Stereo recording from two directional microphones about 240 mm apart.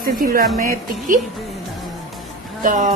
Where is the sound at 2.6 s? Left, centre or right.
Right.